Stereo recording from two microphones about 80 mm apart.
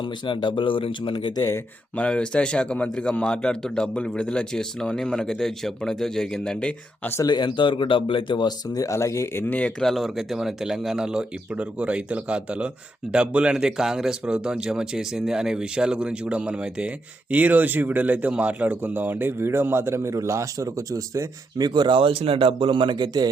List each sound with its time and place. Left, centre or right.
0.4 s speech: left
2.0 s a man's voice: centre
7.3 s speech: left
8.7 s speech: left
9.5 s a man's voice: centre
9.8 s speech: centre; by 21.7 s right
21.7 s speech: right